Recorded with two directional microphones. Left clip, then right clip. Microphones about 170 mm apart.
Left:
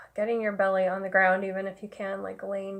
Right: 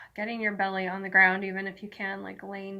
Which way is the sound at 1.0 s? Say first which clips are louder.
Right 6 dB; 30° left (ahead or behind).